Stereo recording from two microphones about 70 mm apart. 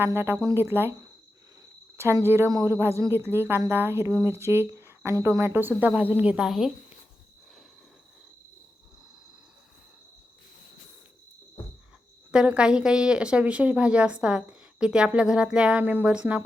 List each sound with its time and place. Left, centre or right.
0.0 s speech: right
2.2 s speech: right
2.5 s speech: right
2.7 s speech: right
5.9 s a woman's voice: right
6.3 s a woman's voice: centre
12.3 s a woman's voice: centre
15.8 s a woman's voice: right